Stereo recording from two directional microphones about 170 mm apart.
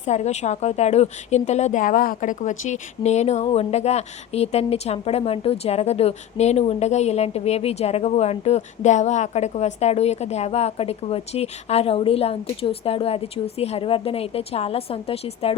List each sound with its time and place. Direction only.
0.0 s a woman's voice: 40° left (ahead or behind)